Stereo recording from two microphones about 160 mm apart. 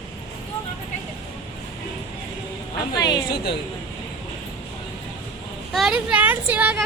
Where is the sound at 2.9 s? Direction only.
25° left (ahead or behind).